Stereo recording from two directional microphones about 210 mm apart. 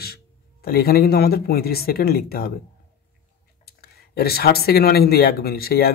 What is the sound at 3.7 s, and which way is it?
Speech, 50° left (ahead or behind).